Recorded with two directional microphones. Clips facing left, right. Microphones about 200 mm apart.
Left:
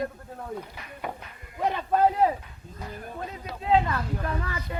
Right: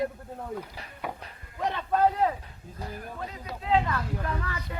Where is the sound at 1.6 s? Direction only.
10° left (ahead or behind).